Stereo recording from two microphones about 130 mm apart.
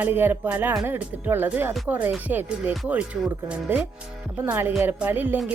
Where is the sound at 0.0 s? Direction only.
15° right (ahead or behind).